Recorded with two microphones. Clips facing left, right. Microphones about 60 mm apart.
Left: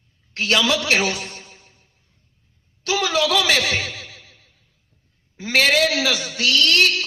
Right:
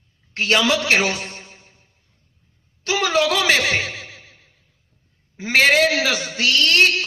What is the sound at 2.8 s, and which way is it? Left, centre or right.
A man's voice, right.